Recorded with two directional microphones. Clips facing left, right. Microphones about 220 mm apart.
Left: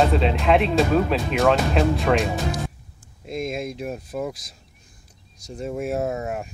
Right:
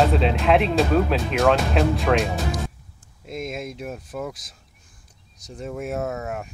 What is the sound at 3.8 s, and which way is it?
Speech, 35° left (ahead or behind).